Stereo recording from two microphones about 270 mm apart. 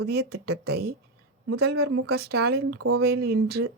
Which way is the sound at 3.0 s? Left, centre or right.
Right.